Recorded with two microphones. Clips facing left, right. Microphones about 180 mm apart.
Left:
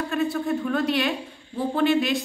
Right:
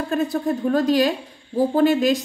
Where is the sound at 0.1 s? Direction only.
35° right (ahead or behind).